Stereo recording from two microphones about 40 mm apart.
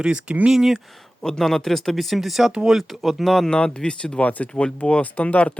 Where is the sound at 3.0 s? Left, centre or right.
Centre.